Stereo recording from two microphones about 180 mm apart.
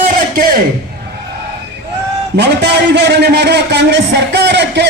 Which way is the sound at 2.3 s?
70° right (ahead or behind).